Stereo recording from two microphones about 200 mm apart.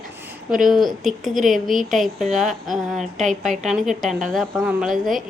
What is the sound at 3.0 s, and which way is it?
Speech, 35° right (ahead or behind).